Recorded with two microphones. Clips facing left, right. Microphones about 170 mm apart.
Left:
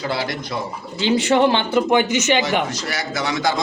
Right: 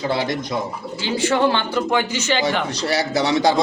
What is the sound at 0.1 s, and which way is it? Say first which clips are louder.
Speech: right 3 dB; 20° right (ahead or behind).